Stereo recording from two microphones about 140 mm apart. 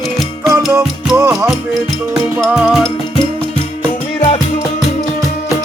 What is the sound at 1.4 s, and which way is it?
Music, centre (ahead or behind).